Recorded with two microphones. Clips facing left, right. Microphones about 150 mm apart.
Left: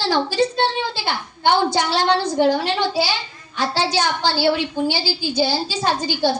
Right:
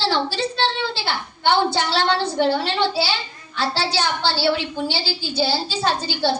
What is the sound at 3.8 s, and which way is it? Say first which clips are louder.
Speech: left 2 dB; 45° left (ahead or behind).